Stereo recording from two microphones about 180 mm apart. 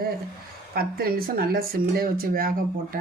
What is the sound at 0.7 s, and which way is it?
Speech, 55° right (ahead or behind).